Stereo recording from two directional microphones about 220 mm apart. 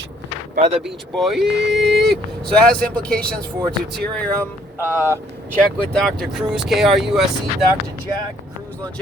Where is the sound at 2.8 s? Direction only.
5° left (ahead or behind).